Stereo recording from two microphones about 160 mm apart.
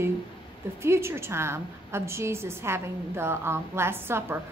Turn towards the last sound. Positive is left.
turn(degrees=-15)  # may be behind; listen again after turning